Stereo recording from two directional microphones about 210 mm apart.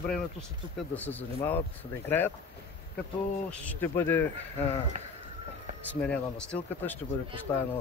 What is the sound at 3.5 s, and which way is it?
Speech, 5° left (ahead or behind).